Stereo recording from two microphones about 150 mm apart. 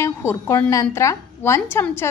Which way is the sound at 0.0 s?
15° left (ahead or behind).